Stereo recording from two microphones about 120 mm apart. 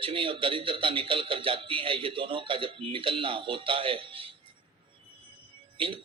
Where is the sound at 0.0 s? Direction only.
45° right (ahead or behind).